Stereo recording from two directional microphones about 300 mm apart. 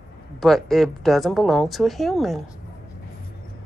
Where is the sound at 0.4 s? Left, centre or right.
Centre.